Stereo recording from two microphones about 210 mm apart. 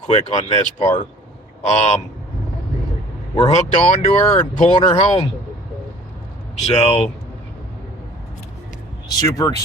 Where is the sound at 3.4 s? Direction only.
30° left (ahead or behind).